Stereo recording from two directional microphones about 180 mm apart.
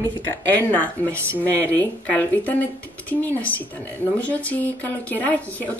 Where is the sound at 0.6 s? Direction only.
10° left (ahead or behind).